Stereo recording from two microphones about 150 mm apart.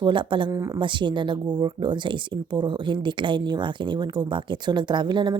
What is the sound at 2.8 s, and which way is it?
Speech, 30° right (ahead or behind).